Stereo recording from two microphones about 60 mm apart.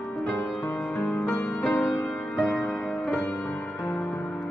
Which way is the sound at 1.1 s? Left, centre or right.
Left.